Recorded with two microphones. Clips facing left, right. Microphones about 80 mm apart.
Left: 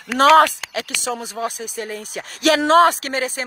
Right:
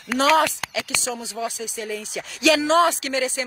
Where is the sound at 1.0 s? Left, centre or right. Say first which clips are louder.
Left 3 dB; left.